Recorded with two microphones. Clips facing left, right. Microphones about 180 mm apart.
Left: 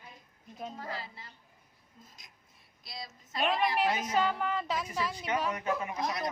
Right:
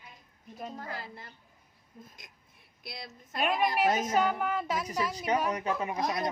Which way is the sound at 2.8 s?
60° right (ahead or behind).